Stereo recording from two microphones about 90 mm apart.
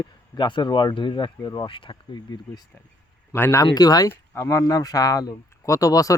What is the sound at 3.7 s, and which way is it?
Speech, 45° left (ahead or behind).